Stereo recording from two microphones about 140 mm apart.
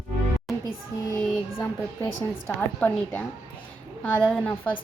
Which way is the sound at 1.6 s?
15° left (ahead or behind).